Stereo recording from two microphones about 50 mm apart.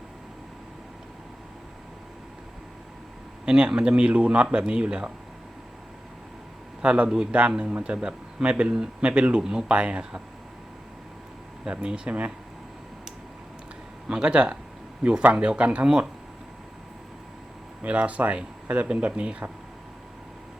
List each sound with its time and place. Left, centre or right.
3.4 s speech: centre
6.8 s speech: right
7.1 s speech: centre
7.7 s speech: right
8.0 s speech: right
11.7 s speech: centre
14.1 s speech: centre
17.8 s speech: right